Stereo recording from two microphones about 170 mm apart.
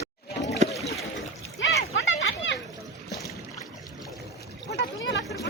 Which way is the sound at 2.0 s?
90° left.